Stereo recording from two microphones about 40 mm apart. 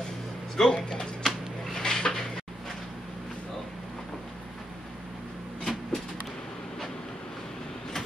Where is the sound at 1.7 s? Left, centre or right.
Centre.